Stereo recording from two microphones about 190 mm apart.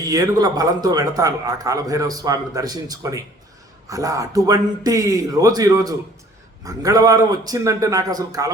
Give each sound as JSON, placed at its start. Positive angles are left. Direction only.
{"t": 0.1, "sound": "a man's voice", "side_deg": -20}